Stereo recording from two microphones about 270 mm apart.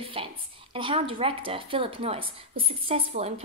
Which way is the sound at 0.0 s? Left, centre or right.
Centre.